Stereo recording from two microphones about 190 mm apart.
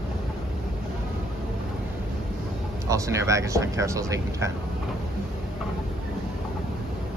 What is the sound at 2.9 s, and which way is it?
Speech, 15° right (ahead or behind).